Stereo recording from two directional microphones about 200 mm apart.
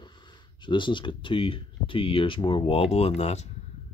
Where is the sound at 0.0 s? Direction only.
20° left (ahead or behind).